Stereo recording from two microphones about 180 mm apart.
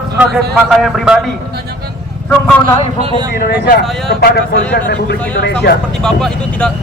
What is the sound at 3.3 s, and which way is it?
Speech, 60° left (ahead or behind).